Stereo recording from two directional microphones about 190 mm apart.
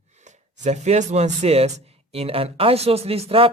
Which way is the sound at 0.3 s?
40° right (ahead or behind).